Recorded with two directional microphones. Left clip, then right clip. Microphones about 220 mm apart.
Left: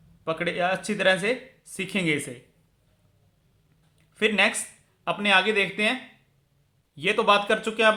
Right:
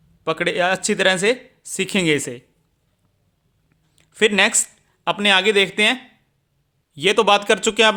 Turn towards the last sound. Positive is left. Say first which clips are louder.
# right 6 dB
turn(degrees=-50)  # may be behind; listen again after turning